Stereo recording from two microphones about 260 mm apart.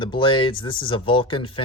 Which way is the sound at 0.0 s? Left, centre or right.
Centre.